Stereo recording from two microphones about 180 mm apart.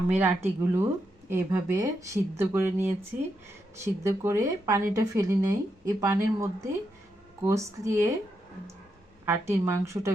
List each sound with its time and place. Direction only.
0.1 s speech: 10° right (ahead or behind)
9.2 s speech: 15° right (ahead or behind)